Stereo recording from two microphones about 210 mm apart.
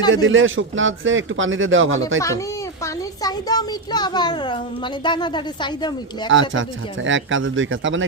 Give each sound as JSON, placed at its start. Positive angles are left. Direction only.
{"t": 0.1, "sound": "speech", "side_deg": -65}
{"t": 2.8, "sound": "a child's voice", "side_deg": 20}
{"t": 6.5, "sound": "speech", "side_deg": -65}